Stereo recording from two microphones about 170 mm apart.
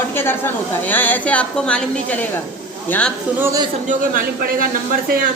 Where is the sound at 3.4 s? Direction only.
15° right (ahead or behind).